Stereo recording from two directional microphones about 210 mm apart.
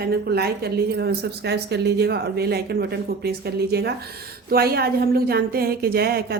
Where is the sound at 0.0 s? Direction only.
50° right (ahead or behind).